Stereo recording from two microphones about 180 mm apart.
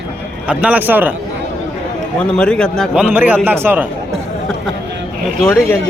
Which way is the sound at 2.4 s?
5° left (ahead or behind).